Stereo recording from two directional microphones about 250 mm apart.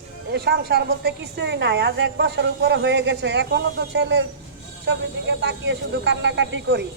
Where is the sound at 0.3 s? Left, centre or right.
Right.